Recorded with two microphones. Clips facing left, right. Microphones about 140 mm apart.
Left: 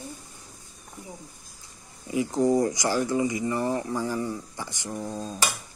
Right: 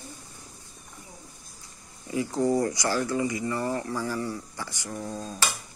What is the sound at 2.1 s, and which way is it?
Speech, 20° left (ahead or behind).